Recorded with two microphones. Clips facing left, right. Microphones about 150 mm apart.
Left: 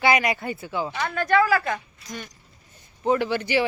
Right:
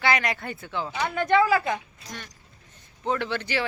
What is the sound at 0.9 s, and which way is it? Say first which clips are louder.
Speech: even; 20° right (ahead or behind).